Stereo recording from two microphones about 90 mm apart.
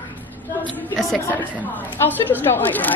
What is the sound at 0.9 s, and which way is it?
Speech, centre (ahead or behind).